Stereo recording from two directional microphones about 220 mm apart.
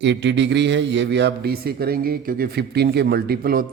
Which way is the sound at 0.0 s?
55° right (ahead or behind).